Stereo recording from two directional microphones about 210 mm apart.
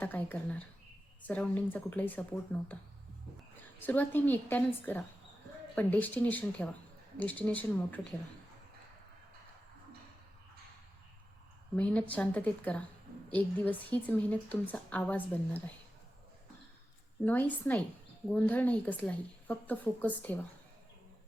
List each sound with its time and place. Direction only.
0.0 s a woman's voice: 10° left (ahead or behind)
11.8 s a woman's voice: 5° left (ahead or behind)
17.2 s a woman's voice: 10° left (ahead or behind)